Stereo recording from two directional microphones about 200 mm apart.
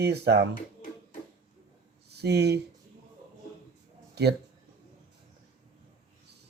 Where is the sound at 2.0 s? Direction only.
55° right (ahead or behind).